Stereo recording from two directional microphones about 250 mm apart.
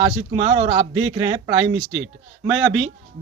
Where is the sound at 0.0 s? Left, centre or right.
Centre.